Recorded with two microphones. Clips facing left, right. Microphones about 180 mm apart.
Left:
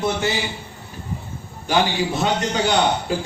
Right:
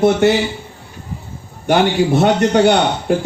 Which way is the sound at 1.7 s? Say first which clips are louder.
Right 7 dB; 60° right (ahead or behind).